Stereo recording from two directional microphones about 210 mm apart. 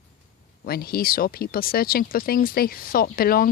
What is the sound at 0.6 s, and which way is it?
Speech, 45° left (ahead or behind).